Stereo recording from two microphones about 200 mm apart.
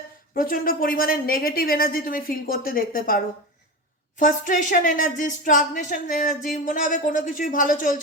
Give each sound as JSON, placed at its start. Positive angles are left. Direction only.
{"t": 0.3, "sound": "a woman's voice", "side_deg": 45}
{"t": 4.2, "sound": "a woman's voice", "side_deg": 40}